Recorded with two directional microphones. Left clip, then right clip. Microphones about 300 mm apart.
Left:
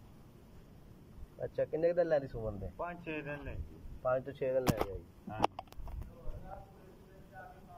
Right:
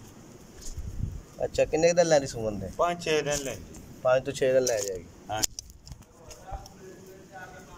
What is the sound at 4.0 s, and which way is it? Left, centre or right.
Speech, centre.